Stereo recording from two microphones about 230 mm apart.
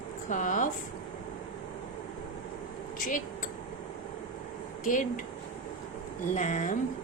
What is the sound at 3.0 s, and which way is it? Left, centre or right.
Speech, left.